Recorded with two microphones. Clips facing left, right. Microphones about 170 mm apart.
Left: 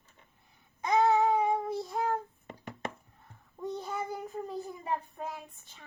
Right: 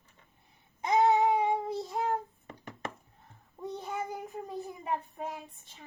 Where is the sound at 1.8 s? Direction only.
25° right (ahead or behind).